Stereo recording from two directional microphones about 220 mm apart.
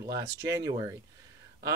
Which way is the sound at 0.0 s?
15° right (ahead or behind).